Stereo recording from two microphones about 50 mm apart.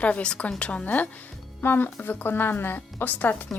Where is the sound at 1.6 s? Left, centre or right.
Left.